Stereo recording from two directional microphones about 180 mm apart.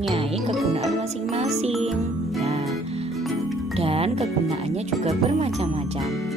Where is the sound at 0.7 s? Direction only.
35° right (ahead or behind).